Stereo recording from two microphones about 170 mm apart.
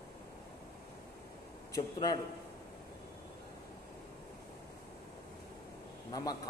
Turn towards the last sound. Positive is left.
turn(degrees=20)  # may be behind; listen again after turning